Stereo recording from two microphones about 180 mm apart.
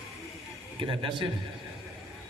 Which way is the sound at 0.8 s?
30° right (ahead or behind).